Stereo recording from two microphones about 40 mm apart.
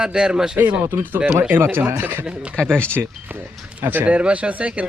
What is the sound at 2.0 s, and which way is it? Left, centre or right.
Speech, right.